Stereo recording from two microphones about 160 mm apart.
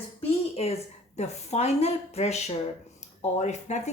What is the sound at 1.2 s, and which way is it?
A woman's voice, 40° left (ahead or behind).